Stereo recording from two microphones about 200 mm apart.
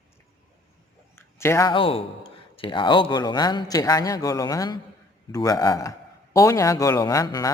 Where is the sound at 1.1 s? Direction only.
15° left (ahead or behind).